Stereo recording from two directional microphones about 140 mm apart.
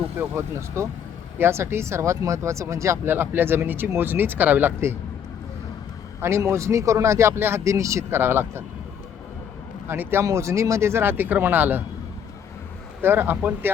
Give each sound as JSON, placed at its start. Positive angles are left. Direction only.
{"t": 0.2, "sound": "speech", "side_deg": -20}
{"t": 6.2, "sound": "speech", "side_deg": -20}
{"t": 9.8, "sound": "speech", "side_deg": -15}
{"t": 13.0, "sound": "speech", "side_deg": -15}